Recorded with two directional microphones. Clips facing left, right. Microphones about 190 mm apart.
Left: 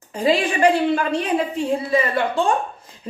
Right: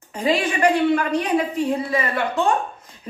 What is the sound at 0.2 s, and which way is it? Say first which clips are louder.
Speech: left 2 dB; 30° left (ahead or behind).